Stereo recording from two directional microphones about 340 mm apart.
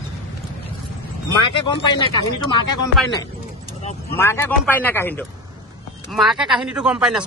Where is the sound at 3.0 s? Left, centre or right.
Centre.